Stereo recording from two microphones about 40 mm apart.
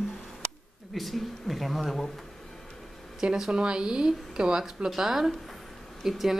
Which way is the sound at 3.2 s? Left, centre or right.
Right.